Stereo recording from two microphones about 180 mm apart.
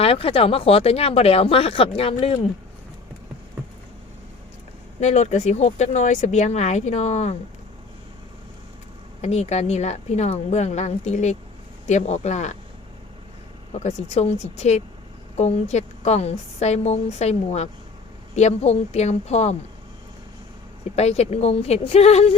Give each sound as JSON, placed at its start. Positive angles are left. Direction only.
{"t": 0.0, "sound": "speech", "side_deg": 30}
{"t": 4.9, "sound": "speech", "side_deg": 40}
{"t": 9.2, "sound": "speech", "side_deg": 35}
{"t": 13.7, "sound": "speech", "side_deg": 35}
{"t": 20.9, "sound": "speech", "side_deg": 35}